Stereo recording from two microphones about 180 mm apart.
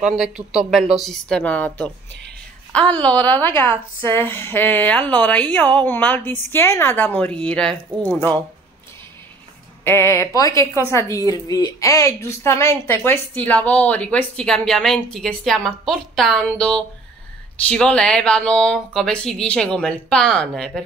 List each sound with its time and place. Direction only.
0.0 s a woman's voice: 5° right (ahead or behind)
9.8 s a woman's voice: 15° left (ahead or behind)